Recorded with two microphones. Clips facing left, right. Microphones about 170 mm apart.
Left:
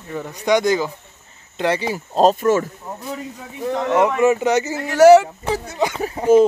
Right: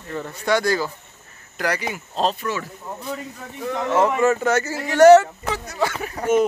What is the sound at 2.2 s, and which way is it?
Speech, 45° left (ahead or behind).